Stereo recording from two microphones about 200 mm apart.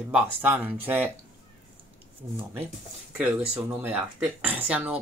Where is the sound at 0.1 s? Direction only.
10° right (ahead or behind).